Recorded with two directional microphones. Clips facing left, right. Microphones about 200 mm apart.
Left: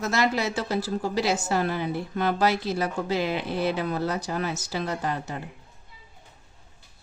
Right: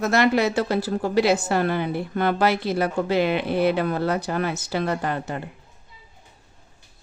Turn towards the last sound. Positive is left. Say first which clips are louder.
# right 4 dB
turn(degrees=-60)  # may be behind; listen again after turning